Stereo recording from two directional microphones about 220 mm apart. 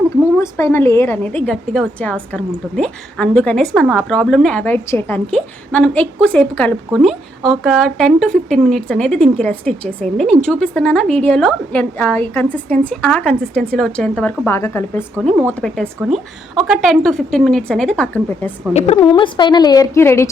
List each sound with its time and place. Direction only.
0.3 s a woman's voice: 10° left (ahead or behind)
18.7 s a woman's voice: 30° left (ahead or behind); by 20.3 s 10° left (ahead or behind)